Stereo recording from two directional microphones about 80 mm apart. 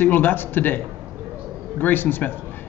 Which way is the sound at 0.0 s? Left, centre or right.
Left.